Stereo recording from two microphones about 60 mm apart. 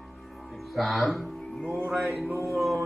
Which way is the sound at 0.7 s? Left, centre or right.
Centre.